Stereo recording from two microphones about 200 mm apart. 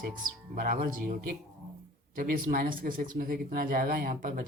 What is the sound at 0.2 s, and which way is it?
Speech, 45° right (ahead or behind).